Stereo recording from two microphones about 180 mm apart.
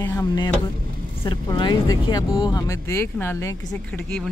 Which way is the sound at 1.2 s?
25° left (ahead or behind).